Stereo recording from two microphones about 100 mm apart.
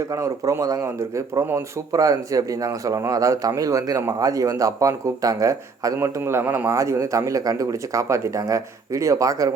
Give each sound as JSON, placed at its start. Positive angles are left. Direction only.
{"t": 0.0, "sound": "speech", "side_deg": -30}
{"t": 1.9, "sound": "a man's voice", "side_deg": -35}